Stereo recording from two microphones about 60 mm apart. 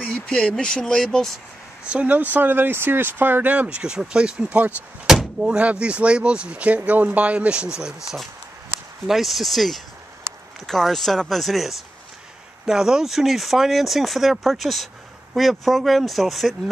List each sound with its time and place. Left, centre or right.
0.0 s speech: centre
1.9 s speech: right
5.1 s door: centre
5.4 s speech: centre